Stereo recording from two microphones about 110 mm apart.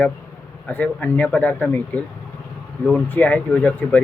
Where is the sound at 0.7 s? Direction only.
15° left (ahead or behind).